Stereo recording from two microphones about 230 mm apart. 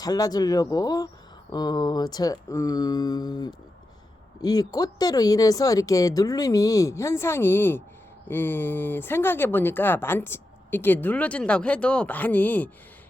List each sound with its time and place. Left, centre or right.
0.0 s speech: centre